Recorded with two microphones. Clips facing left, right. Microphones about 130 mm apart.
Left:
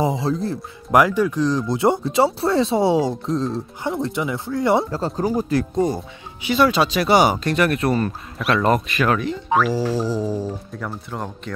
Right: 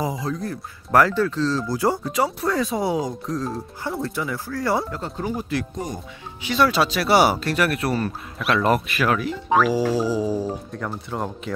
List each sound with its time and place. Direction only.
0.0 s speech: 25° left (ahead or behind)
0.9 s speech: 15° left (ahead or behind)
4.9 s speech: 35° left (ahead or behind)
6.4 s speech: 5° left (ahead or behind)
9.8 s music: 10° right (ahead or behind)
10.7 s speech: centre (ahead or behind)